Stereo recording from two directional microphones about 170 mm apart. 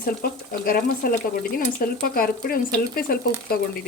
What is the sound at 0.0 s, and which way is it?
Speech, 55° left (ahead or behind).